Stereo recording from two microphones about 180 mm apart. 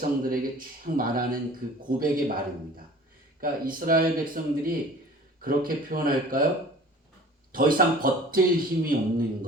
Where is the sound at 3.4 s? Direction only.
50° right (ahead or behind).